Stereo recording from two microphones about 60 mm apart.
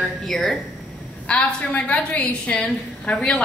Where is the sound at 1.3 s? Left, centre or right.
Left.